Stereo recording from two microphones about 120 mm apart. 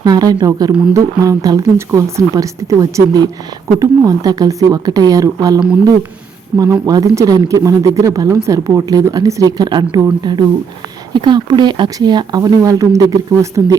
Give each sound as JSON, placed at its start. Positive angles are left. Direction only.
{"t": 0.0, "sound": "speech", "side_deg": -35}
{"t": 6.8, "sound": "speech", "side_deg": -30}